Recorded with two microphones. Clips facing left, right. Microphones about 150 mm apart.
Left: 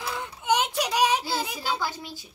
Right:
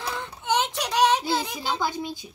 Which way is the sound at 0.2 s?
10° left (ahead or behind).